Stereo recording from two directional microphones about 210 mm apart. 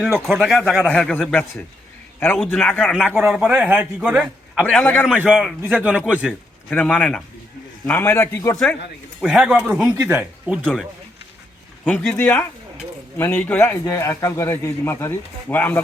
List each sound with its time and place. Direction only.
0.3 s a man's voice: centre (ahead or behind)
2.9 s a man's voice: 5° right (ahead or behind)
4.6 s a man's voice: 10° left (ahead or behind)
5.0 s a man's voice: 5° right (ahead or behind)
6.7 s a man's voice: 5° left (ahead or behind)
9.2 s a man's voice: 5° right (ahead or behind)
11.9 s a man's voice: 5° left (ahead or behind)